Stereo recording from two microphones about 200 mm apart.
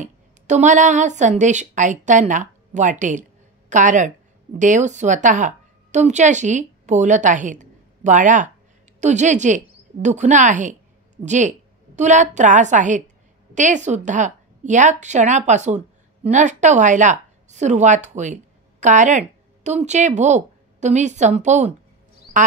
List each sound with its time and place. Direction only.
0.0 s a woman's voice: 35° right (ahead or behind)